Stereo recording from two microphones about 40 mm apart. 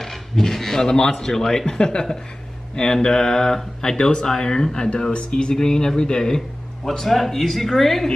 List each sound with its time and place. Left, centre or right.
0.0 s speech: centre
6.8 s speech: centre